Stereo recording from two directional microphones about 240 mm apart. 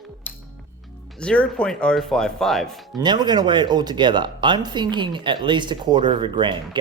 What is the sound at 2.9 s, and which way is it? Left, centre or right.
Speech, centre.